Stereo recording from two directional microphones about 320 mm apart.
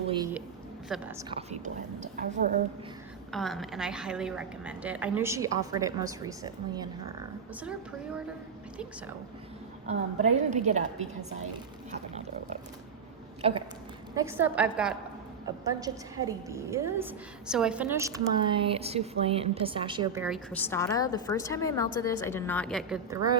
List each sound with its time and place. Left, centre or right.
0.1 s a woman's voice: centre
0.9 s speech: centre
1.3 s a woman's voice: centre
3.3 s a woman's voice: centre
9.8 s a woman's voice: right
11.9 s pig: right
13.4 s a woman's voice: centre
14.2 s a woman's voice: centre
23.0 s a woman's voice: centre